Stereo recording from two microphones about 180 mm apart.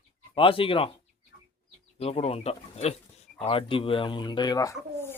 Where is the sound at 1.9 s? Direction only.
35° left (ahead or behind).